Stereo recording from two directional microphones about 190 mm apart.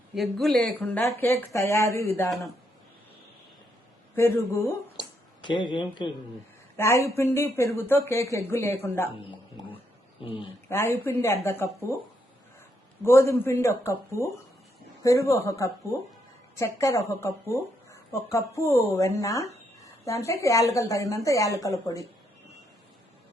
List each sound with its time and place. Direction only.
0.1 s speech: centre (ahead or behind)
4.1 s speech: 10° left (ahead or behind)
4.9 s a sound: 25° left (ahead or behind)
6.7 s speech: 15° left (ahead or behind)
10.2 s speech: 30° left (ahead or behind)
10.7 s speech: 15° left (ahead or behind)
13.1 s speech: 15° left (ahead or behind)